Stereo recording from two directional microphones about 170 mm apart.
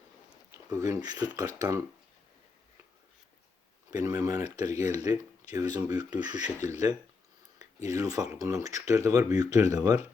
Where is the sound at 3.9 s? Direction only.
20° right (ahead or behind).